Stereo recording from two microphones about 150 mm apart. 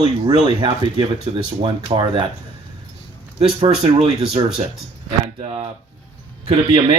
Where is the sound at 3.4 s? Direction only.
40° right (ahead or behind).